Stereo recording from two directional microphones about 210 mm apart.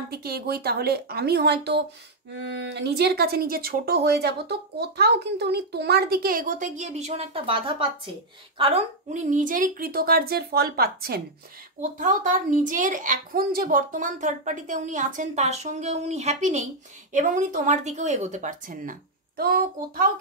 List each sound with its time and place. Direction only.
0.1 s speech: 45° right (ahead or behind)